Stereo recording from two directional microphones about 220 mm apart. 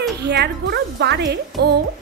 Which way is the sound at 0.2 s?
50° right (ahead or behind).